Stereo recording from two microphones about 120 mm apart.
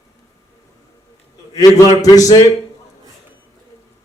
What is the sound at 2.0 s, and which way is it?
Speech, 30° left (ahead or behind).